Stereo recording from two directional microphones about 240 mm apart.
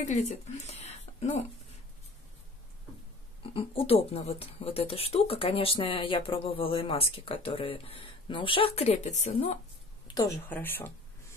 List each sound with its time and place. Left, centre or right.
0.0 s speech: left
3.4 s speech: left
10.1 s speech: centre